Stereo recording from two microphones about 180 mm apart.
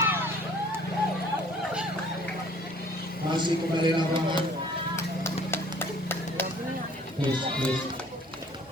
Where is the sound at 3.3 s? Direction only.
25° right (ahead or behind).